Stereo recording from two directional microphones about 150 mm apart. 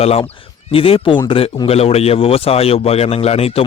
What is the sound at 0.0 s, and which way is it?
A man's voice, 40° left (ahead or behind).